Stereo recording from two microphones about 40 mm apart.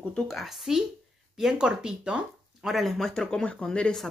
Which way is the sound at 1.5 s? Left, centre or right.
Right.